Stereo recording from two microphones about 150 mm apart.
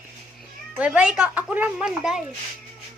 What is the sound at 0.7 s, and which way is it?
A woman's voice, 10° right (ahead or behind).